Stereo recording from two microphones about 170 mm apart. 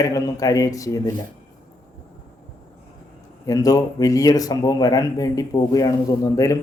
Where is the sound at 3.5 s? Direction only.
20° left (ahead or behind).